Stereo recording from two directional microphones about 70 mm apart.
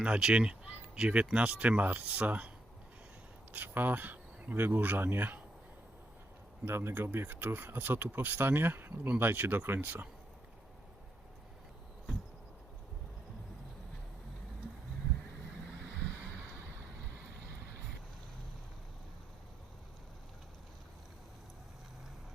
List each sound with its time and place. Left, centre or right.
0.0 s speech: centre
3.5 s speech: right
6.7 s speech: right